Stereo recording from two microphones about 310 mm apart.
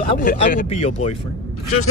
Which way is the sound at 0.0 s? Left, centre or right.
Left.